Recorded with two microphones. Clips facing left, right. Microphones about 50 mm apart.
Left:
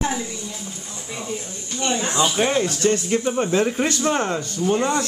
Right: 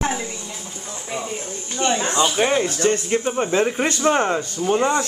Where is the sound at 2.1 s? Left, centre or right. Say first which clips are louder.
Even; centre.